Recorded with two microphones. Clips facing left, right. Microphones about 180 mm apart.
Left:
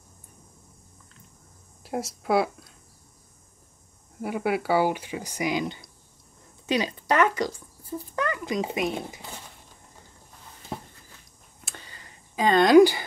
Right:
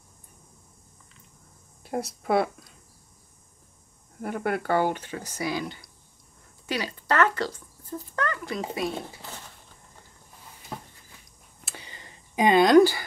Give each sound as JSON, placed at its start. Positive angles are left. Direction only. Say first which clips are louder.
{"t": 1.8, "sound": "speech", "louder": "even", "side_deg": 0}
{"t": 4.2, "sound": "speech", "louder": "left 2 dB", "side_deg": 5}
{"t": 11.8, "sound": "a sound", "louder": "right 2 dB", "side_deg": -20}
{"t": 12.7, "sound": "speech", "louder": "left 4 dB", "side_deg": 15}